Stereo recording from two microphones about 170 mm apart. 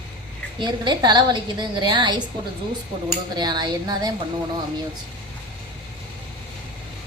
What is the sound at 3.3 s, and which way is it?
Speech, 25° right (ahead or behind).